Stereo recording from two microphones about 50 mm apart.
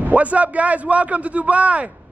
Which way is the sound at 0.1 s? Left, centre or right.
Right.